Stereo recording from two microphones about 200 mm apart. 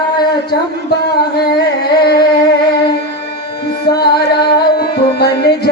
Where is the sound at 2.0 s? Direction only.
50° left (ahead or behind).